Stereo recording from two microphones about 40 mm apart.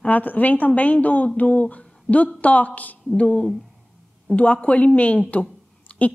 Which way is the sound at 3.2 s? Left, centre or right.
Left.